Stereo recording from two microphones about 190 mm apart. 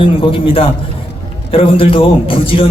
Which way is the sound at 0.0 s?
30° left (ahead or behind).